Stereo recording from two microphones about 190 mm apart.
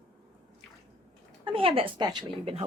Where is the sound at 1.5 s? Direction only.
30° right (ahead or behind).